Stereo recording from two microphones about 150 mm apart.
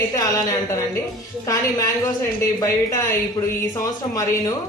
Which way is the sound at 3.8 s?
20° left (ahead or behind).